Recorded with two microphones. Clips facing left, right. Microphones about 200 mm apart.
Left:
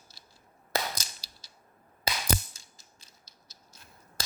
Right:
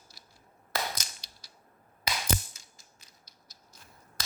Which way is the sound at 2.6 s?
30° left (ahead or behind).